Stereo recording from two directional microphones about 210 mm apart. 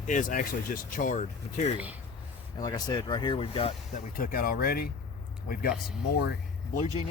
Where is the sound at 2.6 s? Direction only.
20° left (ahead or behind).